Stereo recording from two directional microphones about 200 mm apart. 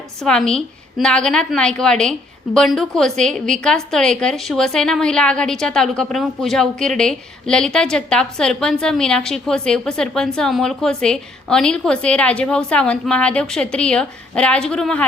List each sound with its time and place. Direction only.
0.2 s a woman's voice: 5° left (ahead or behind)